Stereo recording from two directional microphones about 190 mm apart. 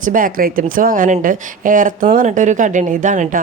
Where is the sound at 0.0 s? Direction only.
45° right (ahead or behind).